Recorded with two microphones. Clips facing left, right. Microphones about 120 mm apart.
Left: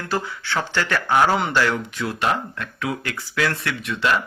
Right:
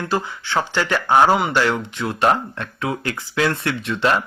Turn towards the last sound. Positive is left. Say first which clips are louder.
# right 3 dB
turn(degrees=-30)  # may be behind; listen again after turning